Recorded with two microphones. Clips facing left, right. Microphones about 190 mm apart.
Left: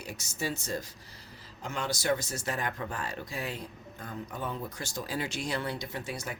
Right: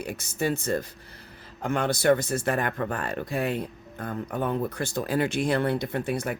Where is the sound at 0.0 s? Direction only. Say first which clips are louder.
Right 8 dB; 55° right (ahead or behind).